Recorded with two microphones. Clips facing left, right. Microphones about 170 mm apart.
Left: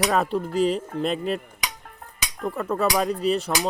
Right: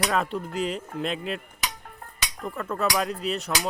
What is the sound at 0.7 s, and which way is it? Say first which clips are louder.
Music: left 5 dB; centre (ahead or behind).